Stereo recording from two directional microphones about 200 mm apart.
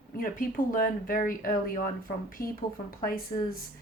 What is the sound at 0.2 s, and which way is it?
Speech, 45° left (ahead or behind).